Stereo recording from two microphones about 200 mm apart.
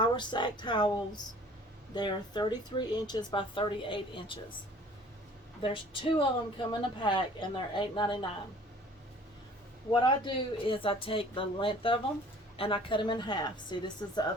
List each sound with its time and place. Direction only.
0.0 s a woman's voice: 20° left (ahead or behind)
5.6 s a woman's voice: 25° left (ahead or behind)
9.9 s a woman's voice: 25° left (ahead or behind)